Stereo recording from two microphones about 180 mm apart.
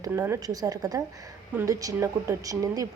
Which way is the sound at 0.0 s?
15° right (ahead or behind).